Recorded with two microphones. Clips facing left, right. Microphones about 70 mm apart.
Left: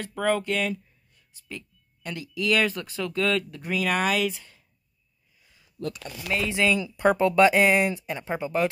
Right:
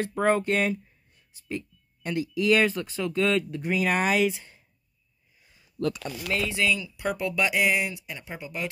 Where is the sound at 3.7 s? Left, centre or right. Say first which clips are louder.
Even; right.